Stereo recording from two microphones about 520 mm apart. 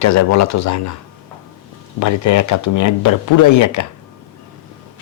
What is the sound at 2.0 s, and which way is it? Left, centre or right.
Speech, left.